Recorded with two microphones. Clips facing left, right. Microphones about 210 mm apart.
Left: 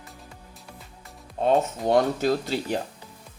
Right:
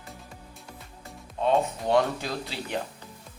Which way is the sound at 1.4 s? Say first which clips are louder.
Left 3 dB; 45° left (ahead or behind).